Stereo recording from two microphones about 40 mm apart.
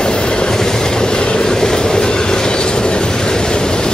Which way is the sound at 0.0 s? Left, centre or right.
Centre.